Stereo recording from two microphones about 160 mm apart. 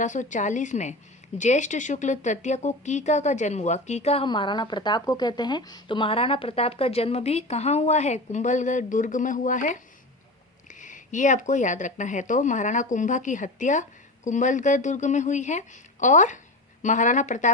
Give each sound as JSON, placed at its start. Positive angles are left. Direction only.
{"t": 0.0, "sound": "a woman's voice", "side_deg": 50}